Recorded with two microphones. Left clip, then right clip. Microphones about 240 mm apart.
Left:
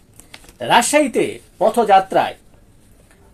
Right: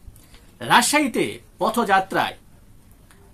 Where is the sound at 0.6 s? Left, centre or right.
Centre.